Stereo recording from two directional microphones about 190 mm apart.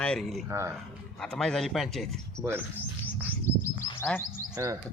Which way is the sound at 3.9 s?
25° left (ahead or behind).